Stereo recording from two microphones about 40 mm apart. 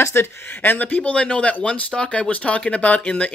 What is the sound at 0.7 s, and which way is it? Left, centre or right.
Speech, left.